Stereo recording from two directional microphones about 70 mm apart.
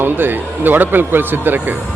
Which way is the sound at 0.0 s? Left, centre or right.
Right.